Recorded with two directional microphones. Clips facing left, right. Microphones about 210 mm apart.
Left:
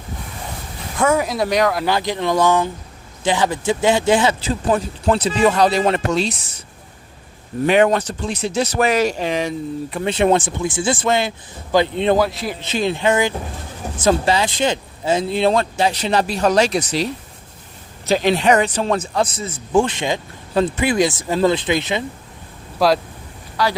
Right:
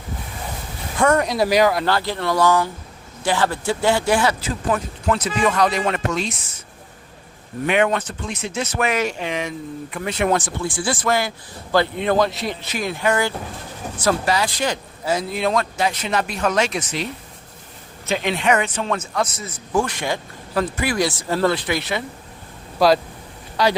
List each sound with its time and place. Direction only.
0.9 s speech: 5° left (ahead or behind)
1.8 s speech: 15° left (ahead or behind); by 6.3 s 30° left (ahead or behind)
7.7 s speech: 35° left (ahead or behind); by 12.1 s 20° left (ahead or behind)
12.1 s speech: 5° left (ahead or behind)
12.6 s speech: 25° left (ahead or behind)
22.8 s speech: centre (ahead or behind)
23.6 s speech: 20° right (ahead or behind)